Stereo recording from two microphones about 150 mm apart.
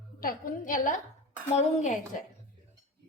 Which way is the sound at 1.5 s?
50° left (ahead or behind).